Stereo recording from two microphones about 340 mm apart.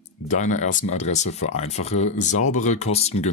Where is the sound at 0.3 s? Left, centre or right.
Left.